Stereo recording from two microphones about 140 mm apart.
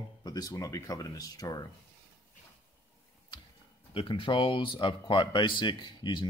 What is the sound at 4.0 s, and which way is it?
Speech, 40° left (ahead or behind).